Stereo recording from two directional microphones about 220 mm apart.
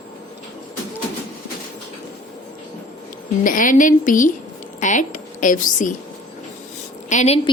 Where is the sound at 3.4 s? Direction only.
35° left (ahead or behind).